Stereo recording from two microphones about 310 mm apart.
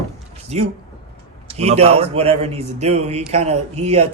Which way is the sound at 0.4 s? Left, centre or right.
Right.